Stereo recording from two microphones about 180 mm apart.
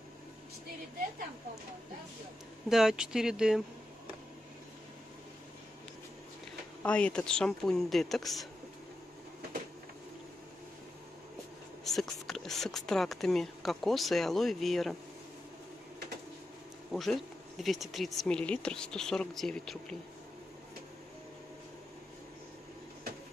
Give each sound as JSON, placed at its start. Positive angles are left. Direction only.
{"t": 2.7, "sound": "speech", "side_deg": -5}
{"t": 6.8, "sound": "speech", "side_deg": 5}
{"t": 11.8, "sound": "speech", "side_deg": 0}
{"t": 16.9, "sound": "speech", "side_deg": 0}